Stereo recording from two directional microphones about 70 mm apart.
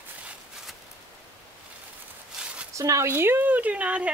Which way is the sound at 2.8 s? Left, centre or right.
Right.